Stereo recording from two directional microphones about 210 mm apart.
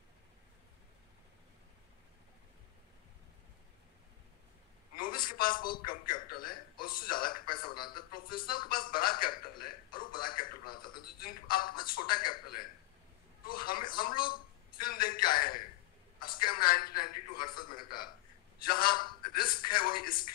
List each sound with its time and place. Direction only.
5.0 s a man's voice: 40° left (ahead or behind)
10.6 s a sound: 45° left (ahead or behind)
11.1 s a man's voice: 45° left (ahead or behind)